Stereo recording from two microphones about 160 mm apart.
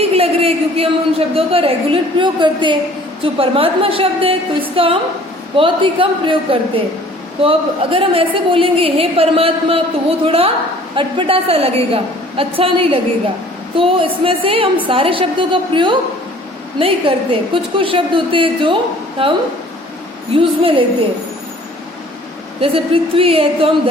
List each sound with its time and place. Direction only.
0.0 s a sound: 35° right (ahead or behind)
1.3 s a woman's voice: 35° right (ahead or behind)
22.6 s a woman's voice: 35° right (ahead or behind)